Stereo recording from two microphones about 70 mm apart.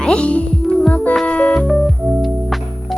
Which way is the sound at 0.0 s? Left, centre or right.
Centre.